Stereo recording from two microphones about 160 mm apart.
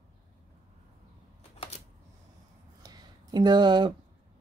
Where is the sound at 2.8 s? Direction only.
25° right (ahead or behind).